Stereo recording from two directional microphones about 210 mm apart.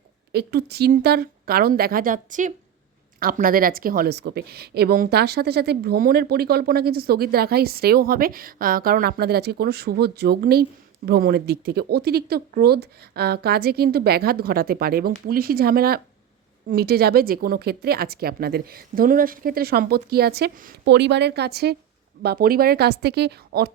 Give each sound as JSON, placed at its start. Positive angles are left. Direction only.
{"t": 0.3, "sound": "a woman's voice", "side_deg": -50}